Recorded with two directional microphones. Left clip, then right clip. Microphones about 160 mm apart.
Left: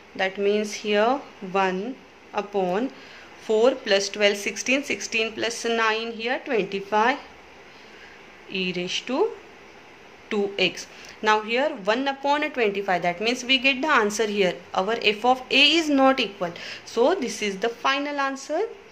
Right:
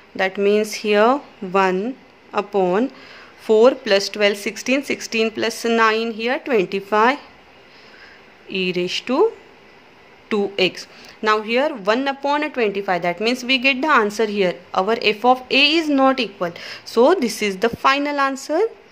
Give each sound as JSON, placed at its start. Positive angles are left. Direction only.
{"t": 0.1, "sound": "speech", "side_deg": -50}
{"t": 8.5, "sound": "a woman's voice", "side_deg": -50}
{"t": 16.3, "sound": "speech", "side_deg": -45}